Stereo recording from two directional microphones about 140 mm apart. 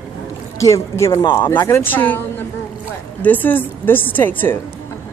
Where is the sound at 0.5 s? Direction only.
20° left (ahead or behind).